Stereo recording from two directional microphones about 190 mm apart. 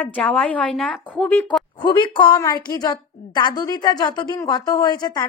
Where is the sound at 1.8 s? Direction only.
25° left (ahead or behind).